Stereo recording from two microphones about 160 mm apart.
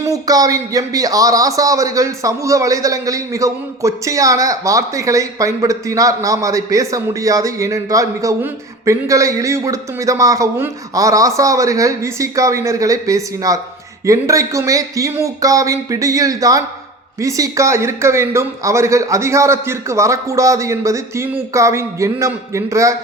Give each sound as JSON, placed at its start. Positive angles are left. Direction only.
{"t": 0.0, "sound": "a man's voice", "side_deg": -20}